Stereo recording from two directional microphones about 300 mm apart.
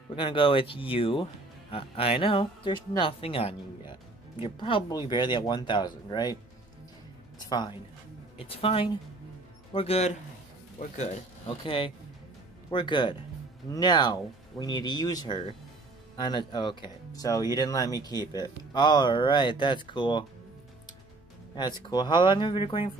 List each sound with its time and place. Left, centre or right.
0.1 s speech: centre
7.3 s speech: centre
21.5 s speech: centre